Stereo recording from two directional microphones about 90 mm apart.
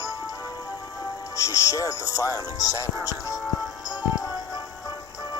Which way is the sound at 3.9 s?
45° left (ahead or behind).